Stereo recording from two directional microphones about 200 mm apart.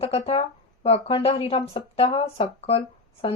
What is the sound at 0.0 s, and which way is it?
Speech, 30° left (ahead or behind).